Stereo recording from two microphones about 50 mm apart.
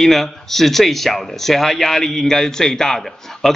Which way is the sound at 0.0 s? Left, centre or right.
Centre.